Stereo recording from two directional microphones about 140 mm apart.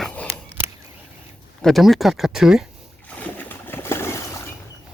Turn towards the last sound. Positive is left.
turn(degrees=20)  # may be behind; listen again after turning